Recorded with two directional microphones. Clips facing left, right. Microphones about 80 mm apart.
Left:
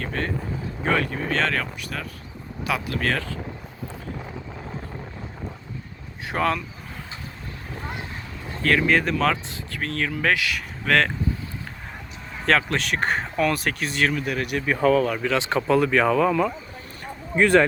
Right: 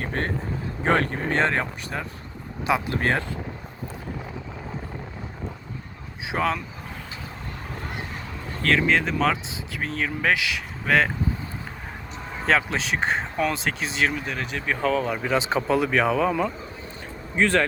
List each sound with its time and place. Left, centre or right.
0.0 s speech: right
6.2 s speech: centre
8.7 s speech: centre
12.5 s speech: centre
14.3 s speech: centre
14.9 s speech: centre
17.3 s speech: centre